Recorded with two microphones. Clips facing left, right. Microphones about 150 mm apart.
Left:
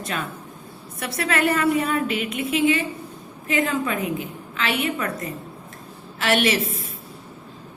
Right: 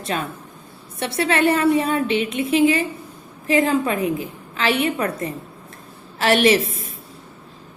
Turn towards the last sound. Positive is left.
turn(degrees=-35)  # may be behind; listen again after turning